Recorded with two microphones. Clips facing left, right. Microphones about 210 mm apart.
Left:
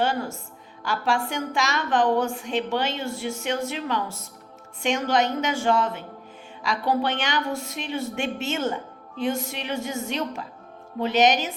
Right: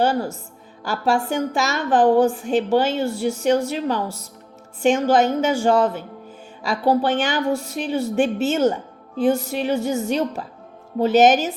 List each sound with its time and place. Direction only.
0.0 s a woman's voice: 40° right (ahead or behind)